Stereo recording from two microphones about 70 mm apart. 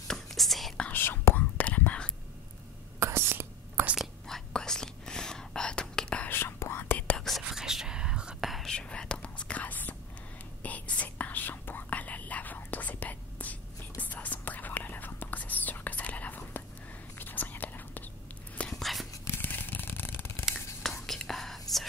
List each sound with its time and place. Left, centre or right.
0.1 s whispering: centre
0.9 s whispering: left
3.0 s whispering: right
4.3 s whispering: centre
6.2 s whispering: left
7.0 s whispering: centre
7.2 s whispering: centre
8.5 s whispering: centre
8.7 s whispering: centre
18.7 s whispering: centre
19.4 s a sound: left
21.1 s whispering: centre